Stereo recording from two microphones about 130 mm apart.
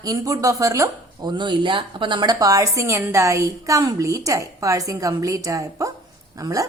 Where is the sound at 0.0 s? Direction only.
25° right (ahead or behind).